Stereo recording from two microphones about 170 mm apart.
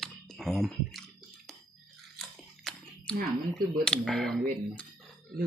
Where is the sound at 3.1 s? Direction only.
5° left (ahead or behind).